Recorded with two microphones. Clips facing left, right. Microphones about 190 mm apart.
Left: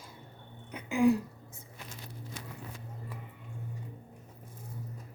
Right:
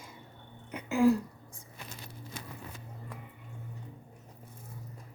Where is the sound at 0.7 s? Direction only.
Centre (ahead or behind).